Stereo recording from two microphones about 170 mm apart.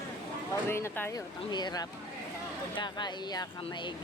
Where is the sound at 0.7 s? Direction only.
15° left (ahead or behind).